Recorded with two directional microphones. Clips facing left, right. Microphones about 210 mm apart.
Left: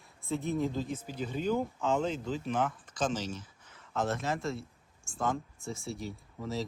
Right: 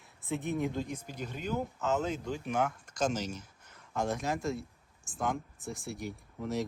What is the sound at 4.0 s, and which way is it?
Speech, centre (ahead or behind).